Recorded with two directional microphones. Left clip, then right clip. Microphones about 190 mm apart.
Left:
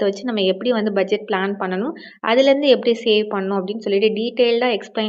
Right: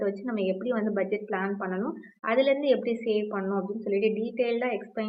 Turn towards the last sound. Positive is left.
turn(degrees=45)  # may be behind; listen again after turning